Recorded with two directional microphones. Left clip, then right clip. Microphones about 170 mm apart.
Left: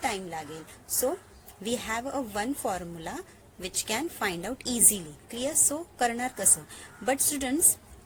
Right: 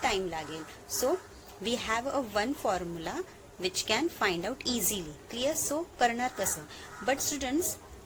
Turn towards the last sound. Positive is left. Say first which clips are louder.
# left 2 dB
turn(degrees=45)  # may be behind; listen again after turning